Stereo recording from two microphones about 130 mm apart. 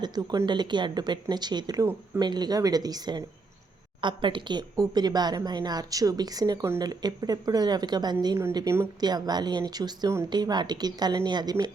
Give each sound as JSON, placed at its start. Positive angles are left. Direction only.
{"t": 0.0, "sound": "speech", "side_deg": -30}
{"t": 8.5, "sound": "speech", "side_deg": -20}